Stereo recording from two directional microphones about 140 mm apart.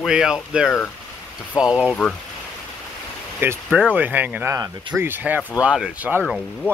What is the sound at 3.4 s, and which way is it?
Speech, 15° right (ahead or behind).